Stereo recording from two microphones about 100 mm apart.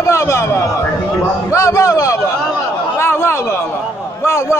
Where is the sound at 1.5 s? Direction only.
35° left (ahead or behind).